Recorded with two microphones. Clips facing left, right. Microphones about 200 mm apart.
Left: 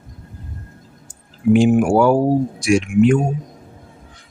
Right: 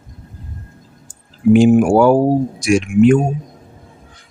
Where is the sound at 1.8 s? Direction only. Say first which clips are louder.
Right 3 dB; 40° right (ahead or behind).